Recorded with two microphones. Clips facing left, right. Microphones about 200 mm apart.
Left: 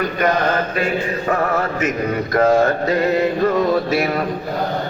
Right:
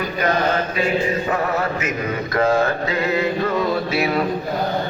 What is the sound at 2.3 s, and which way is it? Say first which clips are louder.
Mantra: left 3 dB; 40° left (ahead or behind).